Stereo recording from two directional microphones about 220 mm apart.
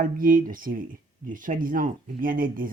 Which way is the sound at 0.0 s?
40° right (ahead or behind).